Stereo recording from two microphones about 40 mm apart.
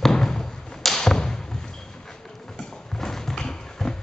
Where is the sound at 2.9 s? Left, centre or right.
Centre.